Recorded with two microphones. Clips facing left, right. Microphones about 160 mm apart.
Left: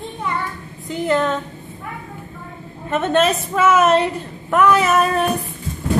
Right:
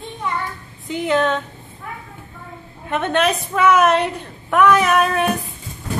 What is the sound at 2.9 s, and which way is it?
A woman's voice, 5° left (ahead or behind).